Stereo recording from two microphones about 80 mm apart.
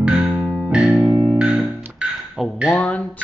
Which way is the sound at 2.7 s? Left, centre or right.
Centre.